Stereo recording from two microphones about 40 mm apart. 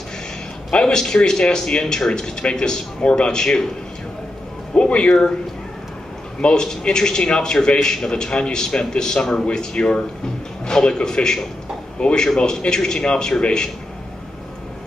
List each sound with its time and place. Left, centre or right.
0.7 s speech: centre
4.7 s speech: left
6.4 s speech: centre